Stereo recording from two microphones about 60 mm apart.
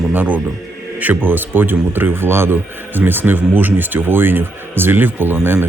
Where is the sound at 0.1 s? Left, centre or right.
Right.